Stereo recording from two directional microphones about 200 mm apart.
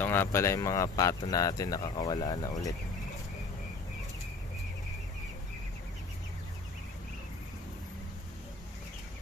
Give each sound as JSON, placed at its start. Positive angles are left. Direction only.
{"t": 0.0, "sound": "speech", "side_deg": 10}